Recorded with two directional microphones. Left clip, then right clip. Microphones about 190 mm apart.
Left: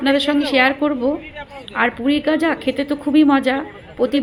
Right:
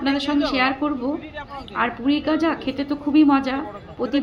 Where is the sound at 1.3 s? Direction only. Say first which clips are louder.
Even; 65° right (ahead or behind).